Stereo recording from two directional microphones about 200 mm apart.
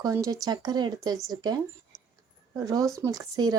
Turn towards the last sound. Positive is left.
turn(degrees=-20)  # may be behind; listen again after turning